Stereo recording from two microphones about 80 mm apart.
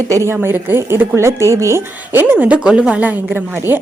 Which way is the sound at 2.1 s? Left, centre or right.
Right.